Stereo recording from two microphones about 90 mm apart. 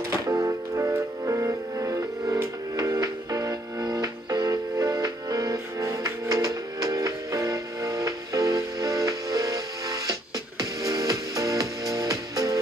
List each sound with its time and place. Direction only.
0.3 s music: 40° right (ahead or behind)